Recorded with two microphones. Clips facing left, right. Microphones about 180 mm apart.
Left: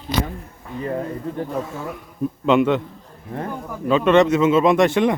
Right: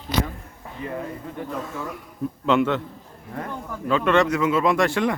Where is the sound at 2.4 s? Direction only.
15° left (ahead or behind).